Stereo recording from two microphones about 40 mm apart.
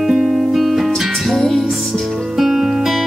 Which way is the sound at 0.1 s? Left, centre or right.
Centre.